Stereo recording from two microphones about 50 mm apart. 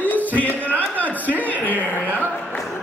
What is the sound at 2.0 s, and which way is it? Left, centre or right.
Speech, right.